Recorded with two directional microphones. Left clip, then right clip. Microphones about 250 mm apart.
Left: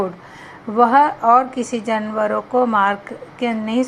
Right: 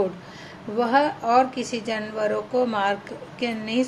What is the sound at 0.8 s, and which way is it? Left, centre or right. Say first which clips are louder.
A woman's voice: left 8 dB; centre.